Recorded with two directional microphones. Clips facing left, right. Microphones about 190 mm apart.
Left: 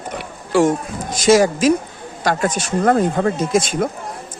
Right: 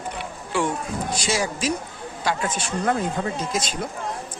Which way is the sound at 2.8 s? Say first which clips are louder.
Left 9 dB; 55° left (ahead or behind).